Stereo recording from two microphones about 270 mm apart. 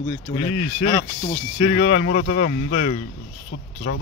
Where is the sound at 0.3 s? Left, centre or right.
Left.